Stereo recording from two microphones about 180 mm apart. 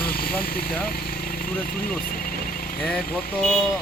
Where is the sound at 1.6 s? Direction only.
55° left (ahead or behind).